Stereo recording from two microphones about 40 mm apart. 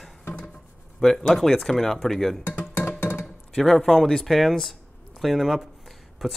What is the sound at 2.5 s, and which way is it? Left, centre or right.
Music, left.